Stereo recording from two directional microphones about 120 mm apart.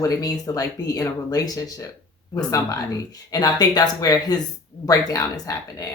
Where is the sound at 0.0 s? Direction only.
30° left (ahead or behind).